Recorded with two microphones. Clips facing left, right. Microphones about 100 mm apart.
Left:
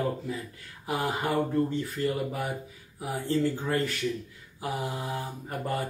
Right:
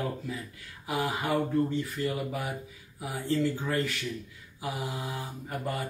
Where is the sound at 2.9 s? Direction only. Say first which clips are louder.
Left 1 dB; 40° left (ahead or behind).